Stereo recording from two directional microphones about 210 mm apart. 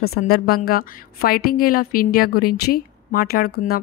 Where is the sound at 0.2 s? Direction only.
40° left (ahead or behind).